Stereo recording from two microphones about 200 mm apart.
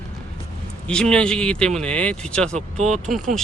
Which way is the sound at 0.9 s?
5° left (ahead or behind).